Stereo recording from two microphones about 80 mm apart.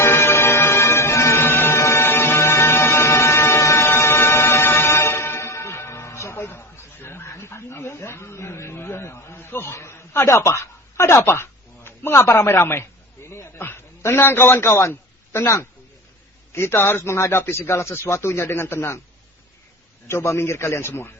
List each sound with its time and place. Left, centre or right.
0.0 s music: left
7.0 s a sound: left
16.5 s a man's voice: left
20.1 s a man's voice: left